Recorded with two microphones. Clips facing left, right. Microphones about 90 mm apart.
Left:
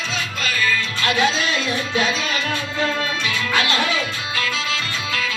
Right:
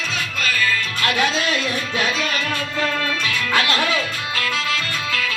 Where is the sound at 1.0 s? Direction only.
20° left (ahead or behind).